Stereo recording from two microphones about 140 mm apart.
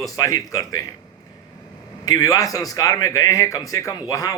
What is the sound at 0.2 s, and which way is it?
Speech, 25° left (ahead or behind).